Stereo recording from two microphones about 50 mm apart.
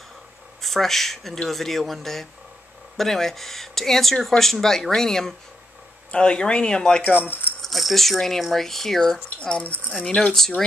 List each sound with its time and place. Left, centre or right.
0.6 s speech: centre
7.2 s speech: left
7.6 s speech: centre
9.4 s speech: left